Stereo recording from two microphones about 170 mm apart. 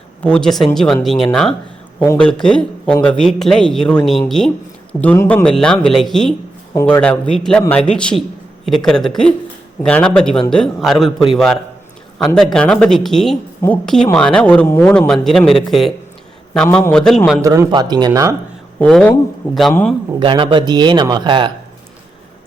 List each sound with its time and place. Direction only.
0.2 s a man's voice: 5° left (ahead or behind)
17.4 s speech: 20° right (ahead or behind)
18.8 s a man's voice: 5° left (ahead or behind)
20.1 s speech: 30° right (ahead or behind)